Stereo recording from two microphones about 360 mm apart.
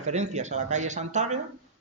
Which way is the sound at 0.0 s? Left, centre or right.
Centre.